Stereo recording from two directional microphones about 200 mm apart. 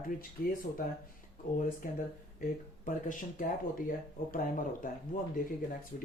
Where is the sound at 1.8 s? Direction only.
45° left (ahead or behind).